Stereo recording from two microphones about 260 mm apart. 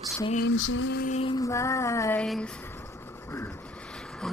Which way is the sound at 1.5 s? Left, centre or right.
Centre.